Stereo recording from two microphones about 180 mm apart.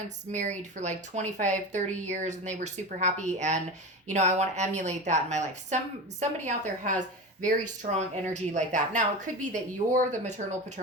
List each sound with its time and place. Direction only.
0.3 s a woman's voice: 40° right (ahead or behind)
7.9 s a woman's voice: 40° right (ahead or behind)